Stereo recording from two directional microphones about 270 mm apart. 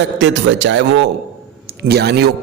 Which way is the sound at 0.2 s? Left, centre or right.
Right.